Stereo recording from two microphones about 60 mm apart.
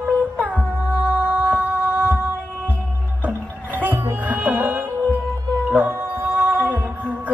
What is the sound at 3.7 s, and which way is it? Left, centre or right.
Music, right.